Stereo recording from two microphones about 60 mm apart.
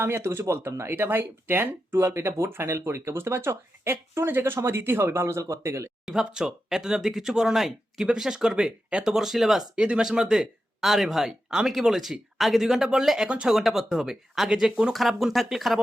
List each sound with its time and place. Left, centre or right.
0.0 s speech: right
2.0 s speech: right
6.1 s speech: centre
9.7 s speech: centre
13.2 s speech: centre
13.5 s speech: centre
14.9 s speech: centre